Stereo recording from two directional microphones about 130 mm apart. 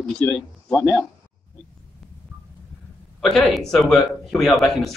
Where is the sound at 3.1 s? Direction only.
Centre (ahead or behind).